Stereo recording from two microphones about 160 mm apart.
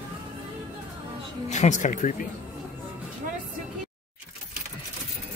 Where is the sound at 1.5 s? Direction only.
45° left (ahead or behind).